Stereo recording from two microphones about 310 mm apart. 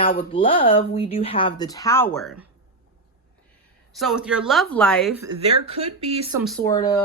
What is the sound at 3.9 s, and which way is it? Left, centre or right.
A woman's voice, centre.